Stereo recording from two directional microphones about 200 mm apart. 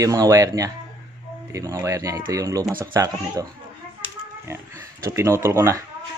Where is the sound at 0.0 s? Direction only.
15° right (ahead or behind).